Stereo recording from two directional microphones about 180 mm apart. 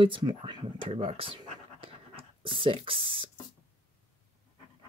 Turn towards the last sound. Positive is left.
turn(degrees=-30)  # may be behind; listen again after turning